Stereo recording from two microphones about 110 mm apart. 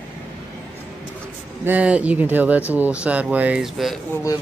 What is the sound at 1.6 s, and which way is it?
Speech, 15° right (ahead or behind).